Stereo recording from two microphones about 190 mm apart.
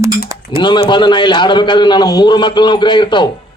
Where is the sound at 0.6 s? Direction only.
25° left (ahead or behind).